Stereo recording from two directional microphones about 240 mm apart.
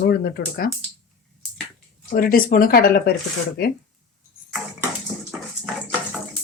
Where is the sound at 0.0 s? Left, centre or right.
Left.